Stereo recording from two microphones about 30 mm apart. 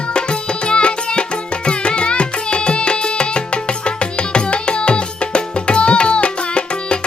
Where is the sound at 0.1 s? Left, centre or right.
Left.